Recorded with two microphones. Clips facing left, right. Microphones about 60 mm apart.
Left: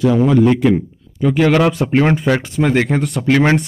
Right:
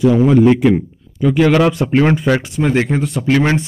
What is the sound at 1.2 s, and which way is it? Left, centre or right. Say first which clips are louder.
Speech: right 1 dB; left.